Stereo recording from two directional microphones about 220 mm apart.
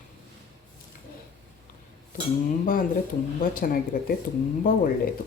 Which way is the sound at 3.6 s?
40° left (ahead or behind).